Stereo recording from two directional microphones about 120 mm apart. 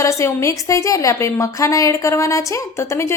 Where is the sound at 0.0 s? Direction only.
25° left (ahead or behind).